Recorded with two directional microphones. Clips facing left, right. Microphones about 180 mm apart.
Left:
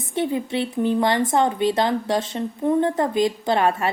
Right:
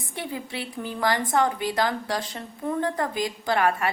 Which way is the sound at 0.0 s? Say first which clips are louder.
Left 10 dB; 25° left (ahead or behind).